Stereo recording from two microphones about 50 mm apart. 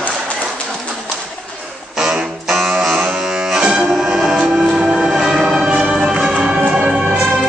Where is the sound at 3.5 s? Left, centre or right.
Centre.